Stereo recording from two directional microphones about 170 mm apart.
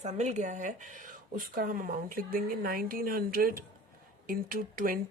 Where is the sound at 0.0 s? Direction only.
40° right (ahead or behind).